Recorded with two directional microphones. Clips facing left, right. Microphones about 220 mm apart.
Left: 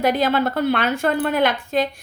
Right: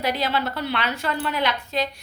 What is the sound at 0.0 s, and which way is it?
A woman's voice, 50° left (ahead or behind).